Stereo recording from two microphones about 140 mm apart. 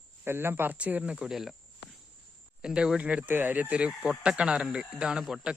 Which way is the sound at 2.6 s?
5° right (ahead or behind).